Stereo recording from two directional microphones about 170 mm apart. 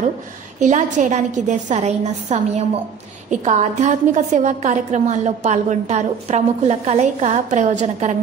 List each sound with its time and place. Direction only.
0.6 s a woman's voice: 45° right (ahead or behind)